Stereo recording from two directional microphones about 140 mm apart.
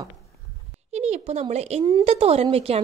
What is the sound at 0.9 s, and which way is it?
A woman's voice, 55° right (ahead or behind).